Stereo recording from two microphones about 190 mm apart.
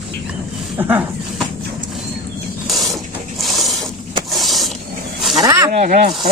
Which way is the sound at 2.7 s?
Centre (ahead or behind).